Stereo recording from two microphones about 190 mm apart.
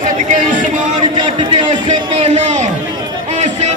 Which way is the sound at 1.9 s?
35° right (ahead or behind).